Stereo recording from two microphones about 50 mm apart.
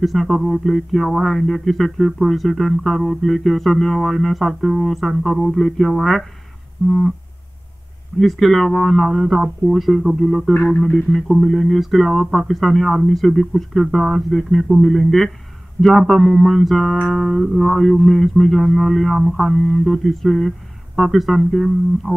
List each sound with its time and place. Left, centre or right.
0.0 s speech: centre
8.2 s speech: centre